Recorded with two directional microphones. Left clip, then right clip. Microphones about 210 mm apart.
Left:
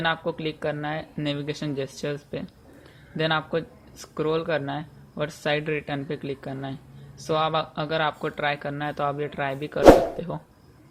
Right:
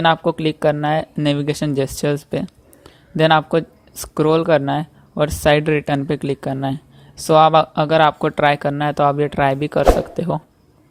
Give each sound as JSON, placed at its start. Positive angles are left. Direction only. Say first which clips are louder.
{"t": 0.0, "sound": "speech", "louder": "right 10 dB", "side_deg": -40}